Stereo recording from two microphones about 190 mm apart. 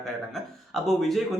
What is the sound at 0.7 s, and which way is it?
Speech, centre (ahead or behind).